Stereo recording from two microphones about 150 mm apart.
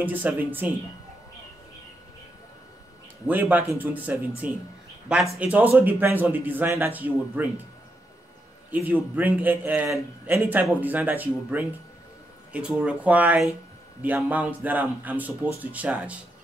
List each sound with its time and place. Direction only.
0.0 s speech: 10° right (ahead or behind)
3.3 s speech: 10° right (ahead or behind)
8.6 s speech: 10° right (ahead or behind)